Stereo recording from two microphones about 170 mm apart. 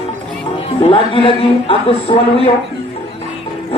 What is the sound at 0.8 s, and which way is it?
Speech, 30° left (ahead or behind).